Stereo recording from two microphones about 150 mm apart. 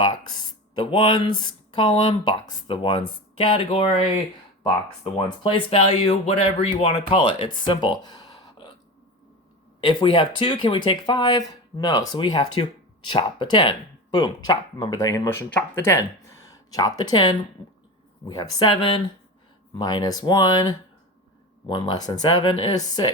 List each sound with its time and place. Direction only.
0.0 s speech: 30° left (ahead or behind)
5.4 s speech: 35° left (ahead or behind)
9.8 s speech: 35° left (ahead or behind)